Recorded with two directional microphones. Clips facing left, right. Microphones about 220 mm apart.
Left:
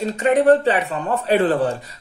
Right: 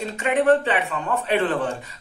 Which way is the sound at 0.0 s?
40° left (ahead or behind).